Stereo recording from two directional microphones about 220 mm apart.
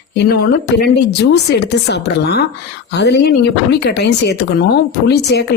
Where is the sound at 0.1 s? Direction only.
50° left (ahead or behind).